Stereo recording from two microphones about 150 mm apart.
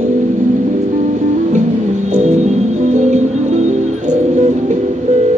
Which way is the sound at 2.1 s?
55° right (ahead or behind).